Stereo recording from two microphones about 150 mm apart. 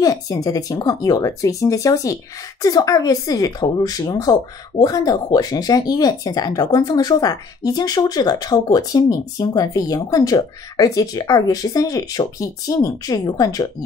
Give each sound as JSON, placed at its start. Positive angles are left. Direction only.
{"t": 0.0, "sound": "speech", "side_deg": 25}